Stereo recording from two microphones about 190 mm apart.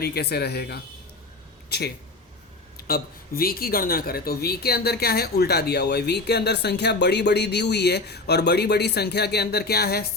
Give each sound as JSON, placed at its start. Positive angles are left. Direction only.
{"t": 0.0, "sound": "speech", "side_deg": 55}